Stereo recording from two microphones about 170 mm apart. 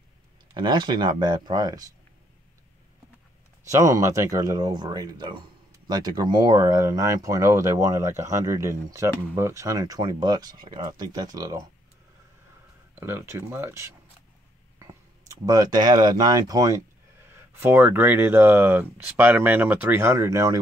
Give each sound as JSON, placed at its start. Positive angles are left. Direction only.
{"t": 0.6, "sound": "speech", "side_deg": -25}
{"t": 3.7, "sound": "speech", "side_deg": -20}
{"t": 12.9, "sound": "speech", "side_deg": -15}